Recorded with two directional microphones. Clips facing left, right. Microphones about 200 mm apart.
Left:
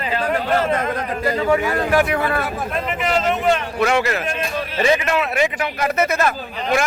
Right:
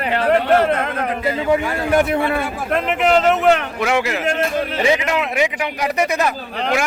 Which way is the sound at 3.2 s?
70° right (ahead or behind).